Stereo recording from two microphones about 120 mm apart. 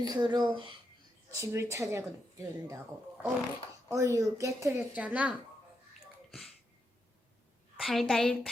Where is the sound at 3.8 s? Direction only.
25° right (ahead or behind).